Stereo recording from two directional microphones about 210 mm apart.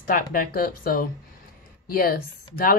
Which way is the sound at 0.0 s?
45° left (ahead or behind).